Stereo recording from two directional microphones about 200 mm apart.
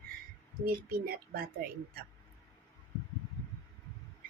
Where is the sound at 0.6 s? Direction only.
45° right (ahead or behind).